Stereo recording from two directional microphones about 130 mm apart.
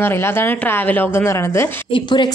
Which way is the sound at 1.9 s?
35° left (ahead or behind).